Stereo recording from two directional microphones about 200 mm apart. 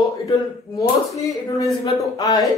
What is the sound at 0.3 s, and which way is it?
Speech, 15° left (ahead or behind).